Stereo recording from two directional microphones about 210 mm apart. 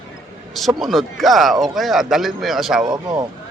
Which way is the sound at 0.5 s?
Centre (ahead or behind).